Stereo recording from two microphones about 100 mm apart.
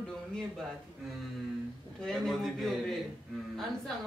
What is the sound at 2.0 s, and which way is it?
Speech, 5° left (ahead or behind).